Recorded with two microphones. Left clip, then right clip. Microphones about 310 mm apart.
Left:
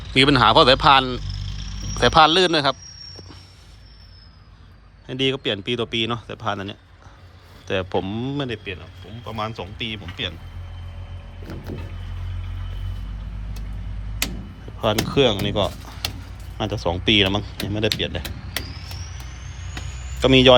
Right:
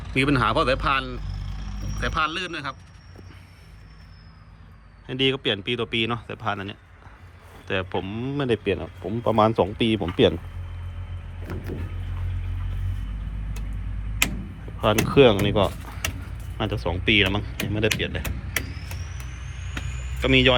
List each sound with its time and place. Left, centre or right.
0.1 s speech: centre
1.3 s vehicle: centre
2.0 s speech: centre
5.0 s speech: centre
14.8 s speech: centre
20.1 s speech: centre